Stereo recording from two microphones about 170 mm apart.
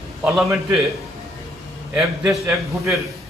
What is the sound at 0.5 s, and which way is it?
A man's voice, centre (ahead or behind).